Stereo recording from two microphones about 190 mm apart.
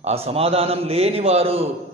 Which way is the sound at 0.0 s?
30° right (ahead or behind).